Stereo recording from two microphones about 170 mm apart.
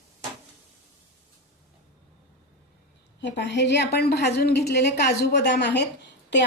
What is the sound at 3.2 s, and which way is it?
A woman's voice, 90° left.